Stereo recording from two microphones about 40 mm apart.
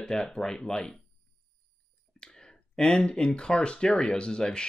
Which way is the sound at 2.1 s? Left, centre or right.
Centre.